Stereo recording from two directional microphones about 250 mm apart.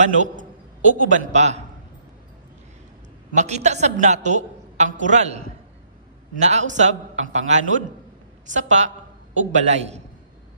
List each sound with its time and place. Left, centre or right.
0.0 s a woman's voice: right
3.3 s a woman's voice: right